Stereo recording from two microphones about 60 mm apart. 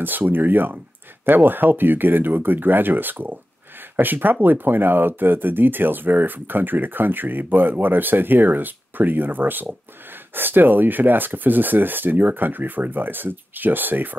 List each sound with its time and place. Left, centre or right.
0.0 s speech: right